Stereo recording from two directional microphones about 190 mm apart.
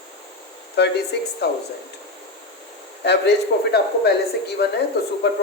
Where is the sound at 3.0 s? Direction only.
60° left (ahead or behind).